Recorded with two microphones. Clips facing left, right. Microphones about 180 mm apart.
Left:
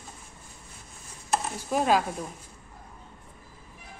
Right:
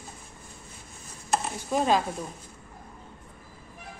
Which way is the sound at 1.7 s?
5° left (ahead or behind).